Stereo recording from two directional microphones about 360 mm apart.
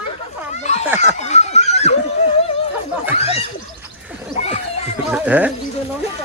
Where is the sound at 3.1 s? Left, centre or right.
Centre.